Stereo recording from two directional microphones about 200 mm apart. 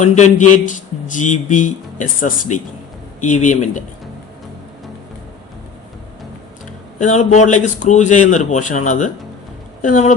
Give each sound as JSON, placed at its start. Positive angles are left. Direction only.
{"t": 0.0, "sound": "a man's voice", "side_deg": 35}
{"t": 7.0, "sound": "a man's voice", "side_deg": 35}